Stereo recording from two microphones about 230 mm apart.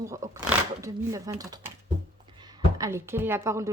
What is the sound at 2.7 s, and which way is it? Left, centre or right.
Speech, centre.